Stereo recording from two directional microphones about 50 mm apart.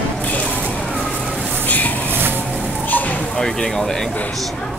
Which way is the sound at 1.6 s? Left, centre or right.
Left.